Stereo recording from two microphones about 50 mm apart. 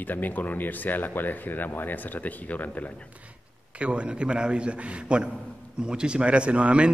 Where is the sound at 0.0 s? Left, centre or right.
Left.